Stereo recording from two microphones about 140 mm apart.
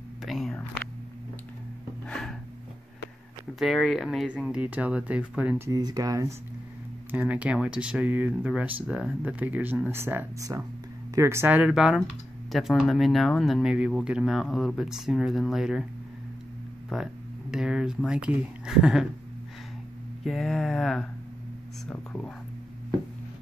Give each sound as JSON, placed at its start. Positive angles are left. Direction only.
{"t": 0.2, "sound": "a sound", "side_deg": 0}
{"t": 2.0, "sound": "a sound", "side_deg": 5}
{"t": 3.5, "sound": "speech", "side_deg": 0}
{"t": 5.7, "sound": "speech", "side_deg": -25}
{"t": 7.1, "sound": "speech", "side_deg": -10}
{"t": 16.9, "sound": "speech", "side_deg": -5}
{"t": 20.2, "sound": "speech", "side_deg": 0}